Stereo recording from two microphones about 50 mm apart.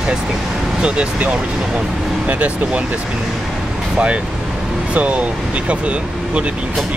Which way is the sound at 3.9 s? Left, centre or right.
Right.